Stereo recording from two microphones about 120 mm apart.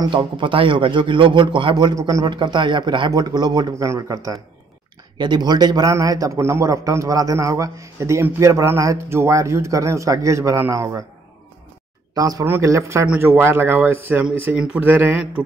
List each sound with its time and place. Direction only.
0.0 s a man's voice: 45° right (ahead or behind)
2.0 s speech: 30° right (ahead or behind)
3.7 s speech: 25° right (ahead or behind)
5.1 s speech: 40° right (ahead or behind)
12.2 s speech: 30° right (ahead or behind); by 15.4 s 15° right (ahead or behind)